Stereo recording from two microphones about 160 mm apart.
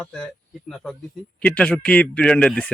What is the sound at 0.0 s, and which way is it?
A man's voice, 5° left (ahead or behind).